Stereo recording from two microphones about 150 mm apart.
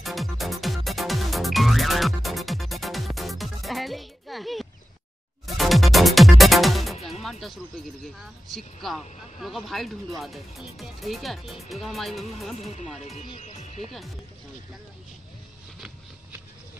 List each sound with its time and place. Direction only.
0.0 s music: centre (ahead or behind)
8.0 s speech: centre (ahead or behind)
12.5 s speech: 45° left (ahead or behind)